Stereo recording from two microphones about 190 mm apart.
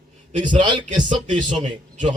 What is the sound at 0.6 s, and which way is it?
Speech, 25° right (ahead or behind).